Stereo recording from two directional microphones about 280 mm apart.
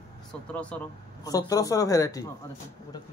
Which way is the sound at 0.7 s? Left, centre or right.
Centre.